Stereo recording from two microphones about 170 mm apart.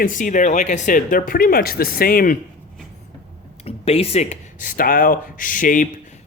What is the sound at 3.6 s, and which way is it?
Speech, 35° left (ahead or behind).